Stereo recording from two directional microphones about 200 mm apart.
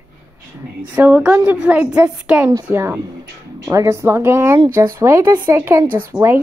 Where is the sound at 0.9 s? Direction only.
10° right (ahead or behind).